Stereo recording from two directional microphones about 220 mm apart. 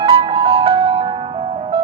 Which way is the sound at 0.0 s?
25° right (ahead or behind).